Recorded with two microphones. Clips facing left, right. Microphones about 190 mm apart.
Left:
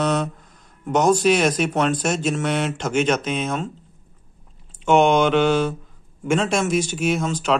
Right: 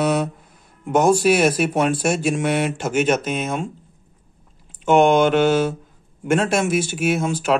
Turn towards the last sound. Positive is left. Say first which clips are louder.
# right 1 dB
turn(degrees=-10)  # may be behind; listen again after turning